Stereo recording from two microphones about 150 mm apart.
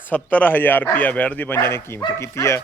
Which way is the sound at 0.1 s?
10° left (ahead or behind).